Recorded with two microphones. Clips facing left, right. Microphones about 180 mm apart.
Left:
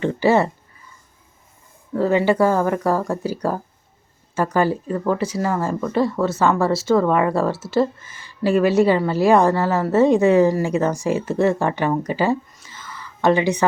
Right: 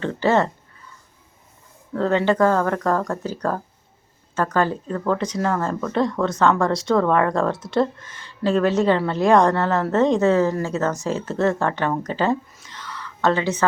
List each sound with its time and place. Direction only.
0.0 s speech: 10° left (ahead or behind)
1.9 s speech: 10° left (ahead or behind)
12.5 s a sound: 5° left (ahead or behind)